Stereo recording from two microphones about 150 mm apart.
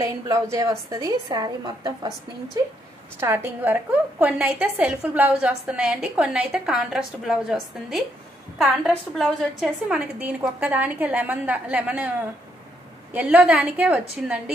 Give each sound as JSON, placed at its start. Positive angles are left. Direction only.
{"t": 0.0, "sound": "a woman's voice", "side_deg": -20}
{"t": 3.2, "sound": "a woman's voice", "side_deg": -15}
{"t": 8.5, "sound": "a woman's voice", "side_deg": 0}
{"t": 13.1, "sound": "a woman's voice", "side_deg": -10}